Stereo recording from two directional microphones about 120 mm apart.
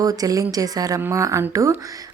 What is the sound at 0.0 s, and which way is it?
A woman's voice, 30° right (ahead or behind).